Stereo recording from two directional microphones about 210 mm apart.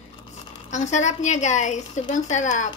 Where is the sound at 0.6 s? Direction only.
35° left (ahead or behind).